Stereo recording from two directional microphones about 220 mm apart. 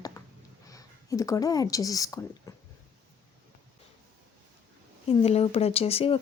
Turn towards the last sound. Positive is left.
turn(degrees=25)  # may be behind; listen again after turning